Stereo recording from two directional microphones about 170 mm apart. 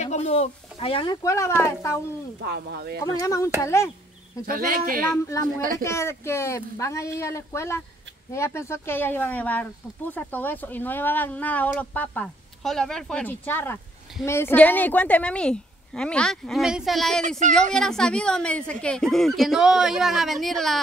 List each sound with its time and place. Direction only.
0.0 s speech: 40° left (ahead or behind)
1.2 s speech: 15° left (ahead or behind)
2.4 s speech: 70° right (ahead or behind)
3.0 s speech: 20° left (ahead or behind)
4.5 s speech: 55° right (ahead or behind)
5.0 s speech: 15° left (ahead or behind)
5.6 s speech: 55° right (ahead or behind)
5.9 s a woman's voice: 15° left (ahead or behind)